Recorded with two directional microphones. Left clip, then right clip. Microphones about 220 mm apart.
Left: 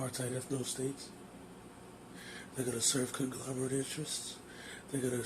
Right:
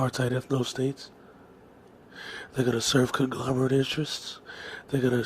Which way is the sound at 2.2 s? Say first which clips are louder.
Right 11 dB; 35° right (ahead or behind).